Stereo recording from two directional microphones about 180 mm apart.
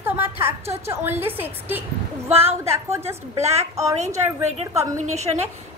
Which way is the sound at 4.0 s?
40° right (ahead or behind).